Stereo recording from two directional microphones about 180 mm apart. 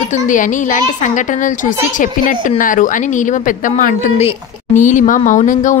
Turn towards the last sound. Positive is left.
turn(degrees=45)  # may be behind; listen again after turning